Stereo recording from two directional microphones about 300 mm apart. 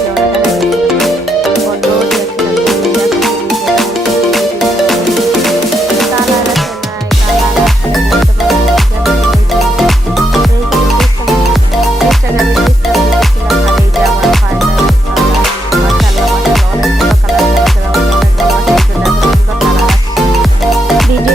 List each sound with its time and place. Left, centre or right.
0.5 s music: centre
4.9 s music: centre
7.6 s music: centre
16.2 s music: centre